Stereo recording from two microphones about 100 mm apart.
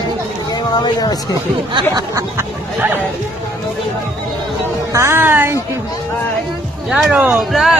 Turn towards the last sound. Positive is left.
turn(degrees=-5)  # may be behind; listen again after turning